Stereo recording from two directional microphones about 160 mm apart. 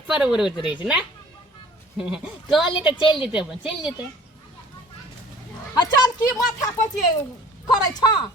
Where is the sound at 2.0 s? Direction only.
5° right (ahead or behind).